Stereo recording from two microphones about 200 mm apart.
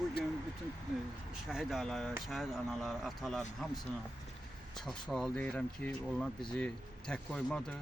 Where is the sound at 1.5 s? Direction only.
Centre (ahead or behind).